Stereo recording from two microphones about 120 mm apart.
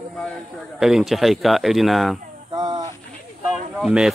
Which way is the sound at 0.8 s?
Centre (ahead or behind).